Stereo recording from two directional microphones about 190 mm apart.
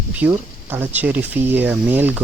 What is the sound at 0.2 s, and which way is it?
Speech, 10° right (ahead or behind).